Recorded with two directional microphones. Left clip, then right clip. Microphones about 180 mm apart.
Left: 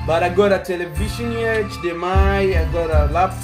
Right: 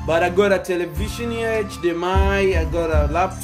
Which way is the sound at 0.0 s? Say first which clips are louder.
Left 1 dB; 5° right (ahead or behind).